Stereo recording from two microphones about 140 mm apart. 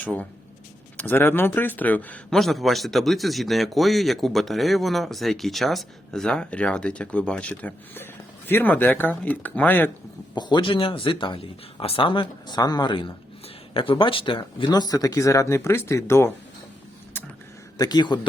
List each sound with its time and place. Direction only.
0.0 s speech: 10° left (ahead or behind)
10.3 s speech: 30° left (ahead or behind)
17.7 s speech: 30° left (ahead or behind)